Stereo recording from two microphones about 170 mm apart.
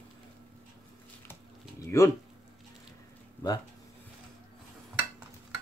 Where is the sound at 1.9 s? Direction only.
20° left (ahead or behind).